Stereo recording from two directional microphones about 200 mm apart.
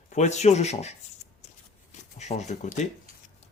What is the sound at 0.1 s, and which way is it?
Speech, 35° left (ahead or behind).